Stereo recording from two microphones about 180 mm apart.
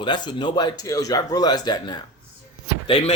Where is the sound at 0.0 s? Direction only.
25° left (ahead or behind).